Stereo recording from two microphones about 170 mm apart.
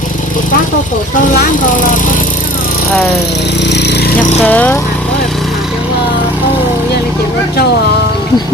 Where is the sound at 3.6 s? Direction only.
85° left.